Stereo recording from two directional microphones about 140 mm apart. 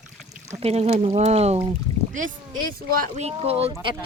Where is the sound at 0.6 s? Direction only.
45° right (ahead or behind).